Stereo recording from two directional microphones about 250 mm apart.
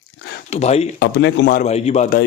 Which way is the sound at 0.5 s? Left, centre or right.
Left.